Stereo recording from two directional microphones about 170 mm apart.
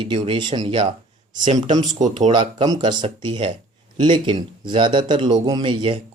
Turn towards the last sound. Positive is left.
turn(degrees=-30)  # may be behind; listen again after turning